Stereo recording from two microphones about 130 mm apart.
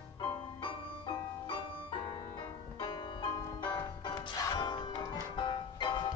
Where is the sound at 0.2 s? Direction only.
35° left (ahead or behind).